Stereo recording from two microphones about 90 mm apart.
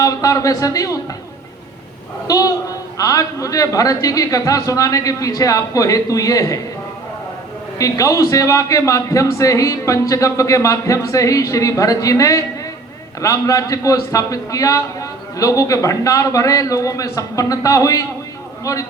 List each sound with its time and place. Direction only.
0.0 s a man's voice: 40° left (ahead or behind)
2.2 s a man's voice: 40° left (ahead or behind)
7.8 s a man's voice: 40° left (ahead or behind)